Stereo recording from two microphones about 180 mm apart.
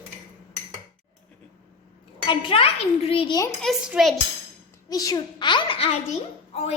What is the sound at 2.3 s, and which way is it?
A woman's voice, 30° left (ahead or behind).